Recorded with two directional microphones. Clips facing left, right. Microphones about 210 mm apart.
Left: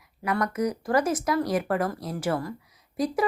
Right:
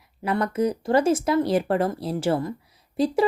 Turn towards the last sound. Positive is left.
turn(degrees=-30)  # may be behind; listen again after turning